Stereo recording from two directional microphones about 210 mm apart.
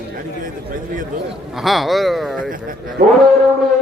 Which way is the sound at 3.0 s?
50° right (ahead or behind).